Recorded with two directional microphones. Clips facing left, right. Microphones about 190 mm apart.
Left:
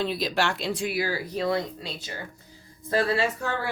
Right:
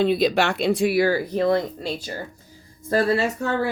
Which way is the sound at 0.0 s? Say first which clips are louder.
Right 7 dB; 60° right (ahead or behind).